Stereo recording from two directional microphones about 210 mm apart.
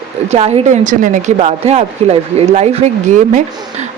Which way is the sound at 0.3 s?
30° right (ahead or behind).